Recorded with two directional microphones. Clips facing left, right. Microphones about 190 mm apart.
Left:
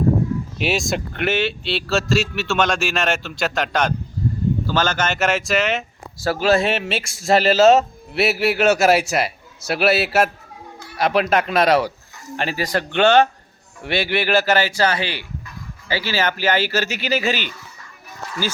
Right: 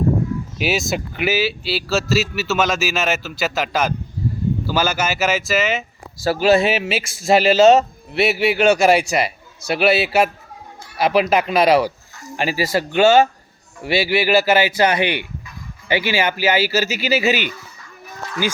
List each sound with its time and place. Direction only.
0.6 s speech: centre (ahead or behind)